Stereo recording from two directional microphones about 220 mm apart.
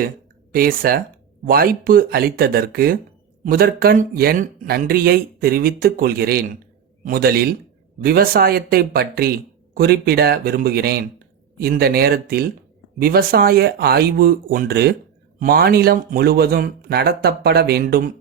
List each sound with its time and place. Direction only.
0.5 s speech: 40° right (ahead or behind)